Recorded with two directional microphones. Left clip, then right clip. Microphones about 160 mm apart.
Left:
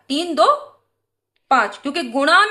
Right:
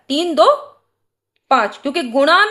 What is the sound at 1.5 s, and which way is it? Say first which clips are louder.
Speech: right 2 dB; 30° right (ahead or behind).